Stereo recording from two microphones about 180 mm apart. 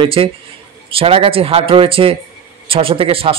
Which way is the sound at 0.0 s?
30° right (ahead or behind).